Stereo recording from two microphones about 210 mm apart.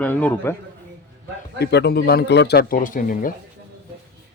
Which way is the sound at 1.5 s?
50° left (ahead or behind).